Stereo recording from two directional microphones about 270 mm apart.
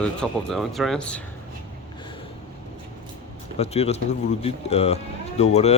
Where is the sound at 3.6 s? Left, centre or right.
Left.